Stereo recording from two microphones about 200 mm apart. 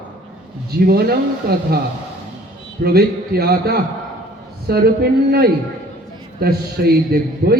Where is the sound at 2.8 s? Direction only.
50° right (ahead or behind).